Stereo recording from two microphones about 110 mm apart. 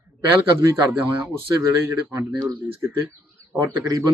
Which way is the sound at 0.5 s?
25° right (ahead or behind).